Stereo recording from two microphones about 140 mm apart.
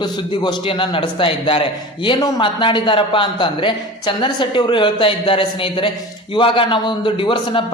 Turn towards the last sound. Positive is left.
turn(degrees=35)  # may be behind; listen again after turning